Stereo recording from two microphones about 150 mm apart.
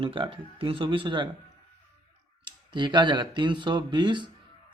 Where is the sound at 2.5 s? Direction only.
30° right (ahead or behind).